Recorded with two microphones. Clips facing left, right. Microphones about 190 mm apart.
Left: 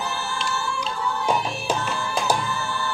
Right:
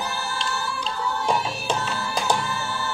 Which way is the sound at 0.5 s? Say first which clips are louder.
Left 1 dB; centre (ahead or behind).